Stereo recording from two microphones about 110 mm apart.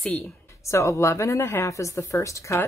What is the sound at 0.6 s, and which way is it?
Speech, 25° left (ahead or behind).